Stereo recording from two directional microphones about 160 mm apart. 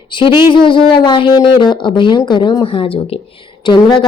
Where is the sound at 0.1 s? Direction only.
30° left (ahead or behind).